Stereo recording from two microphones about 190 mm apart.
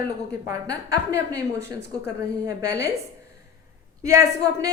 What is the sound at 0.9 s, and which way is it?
Speech, 65° left (ahead or behind).